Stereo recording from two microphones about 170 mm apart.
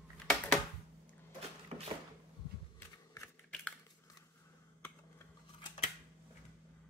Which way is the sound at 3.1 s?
10° left (ahead or behind).